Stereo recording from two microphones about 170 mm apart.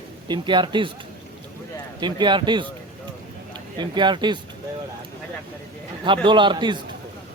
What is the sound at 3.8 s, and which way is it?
Speech, 25° right (ahead or behind).